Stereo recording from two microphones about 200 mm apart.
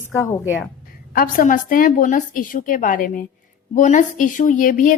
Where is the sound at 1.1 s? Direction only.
45° left (ahead or behind).